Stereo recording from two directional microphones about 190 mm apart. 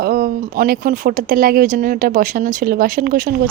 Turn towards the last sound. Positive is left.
turn(degrees=-50)  # may be behind; listen again after turning